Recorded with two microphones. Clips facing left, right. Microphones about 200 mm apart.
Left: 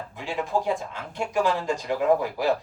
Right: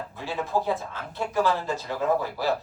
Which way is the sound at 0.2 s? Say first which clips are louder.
Left 1 dB; 15° left (ahead or behind).